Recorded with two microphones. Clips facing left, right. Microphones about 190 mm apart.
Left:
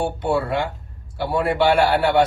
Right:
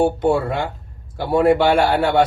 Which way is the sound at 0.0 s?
50° right (ahead or behind).